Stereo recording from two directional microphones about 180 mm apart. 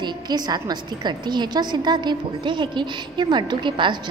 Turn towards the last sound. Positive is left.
turn(degrees=-25)  # may be behind; listen again after turning